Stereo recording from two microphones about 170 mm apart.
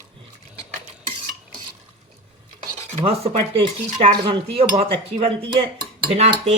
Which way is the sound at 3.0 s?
35° right (ahead or behind).